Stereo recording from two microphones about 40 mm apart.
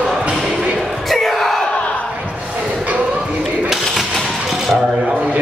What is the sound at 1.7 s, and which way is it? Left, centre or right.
Battle cry, left.